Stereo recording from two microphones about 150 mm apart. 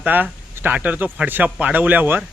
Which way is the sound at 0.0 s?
10° right (ahead or behind).